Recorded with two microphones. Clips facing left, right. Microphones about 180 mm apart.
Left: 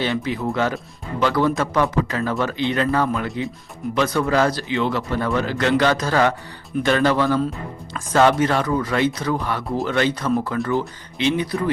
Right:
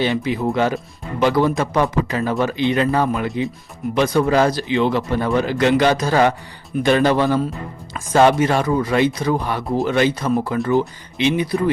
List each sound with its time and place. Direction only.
0.0 s speech: 15° right (ahead or behind)